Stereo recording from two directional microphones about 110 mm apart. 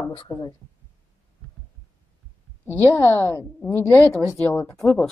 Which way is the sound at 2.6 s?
20° left (ahead or behind).